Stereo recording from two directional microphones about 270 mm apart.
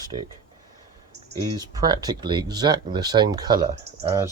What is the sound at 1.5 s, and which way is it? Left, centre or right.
Speech, centre.